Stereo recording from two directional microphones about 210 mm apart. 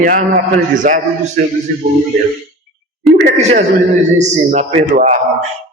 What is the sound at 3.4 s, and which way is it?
A man's voice, 35° right (ahead or behind).